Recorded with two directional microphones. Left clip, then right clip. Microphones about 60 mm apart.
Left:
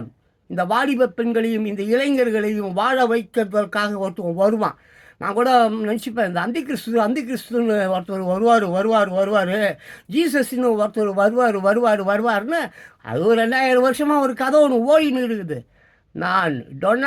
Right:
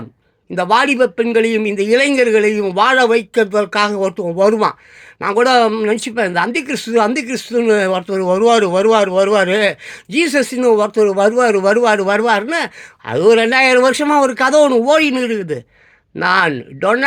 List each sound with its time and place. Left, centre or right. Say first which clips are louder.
0.5 s speech: right 7 dB; left